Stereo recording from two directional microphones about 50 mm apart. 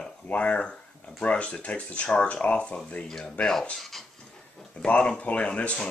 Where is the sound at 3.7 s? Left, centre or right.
Centre.